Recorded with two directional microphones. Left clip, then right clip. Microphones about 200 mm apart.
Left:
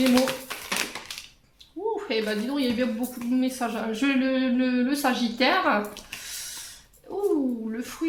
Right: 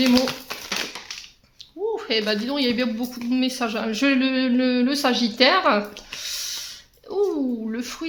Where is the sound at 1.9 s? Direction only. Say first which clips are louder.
Right 5 dB; 45° right (ahead or behind).